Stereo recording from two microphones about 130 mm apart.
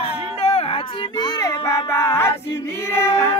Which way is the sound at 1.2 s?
25° left (ahead or behind).